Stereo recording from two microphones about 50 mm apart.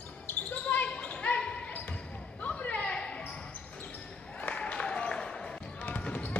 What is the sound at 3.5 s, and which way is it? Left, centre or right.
Basketball bounce, left.